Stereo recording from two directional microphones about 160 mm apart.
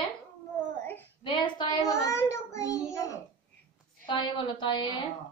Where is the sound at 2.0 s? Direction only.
20° left (ahead or behind).